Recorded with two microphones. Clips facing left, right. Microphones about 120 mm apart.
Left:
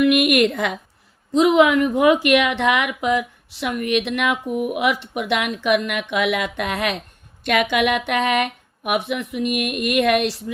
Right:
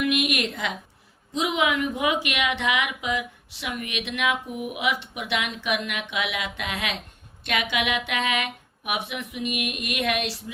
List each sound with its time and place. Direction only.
0.1 s a woman's voice: 60° left (ahead or behind)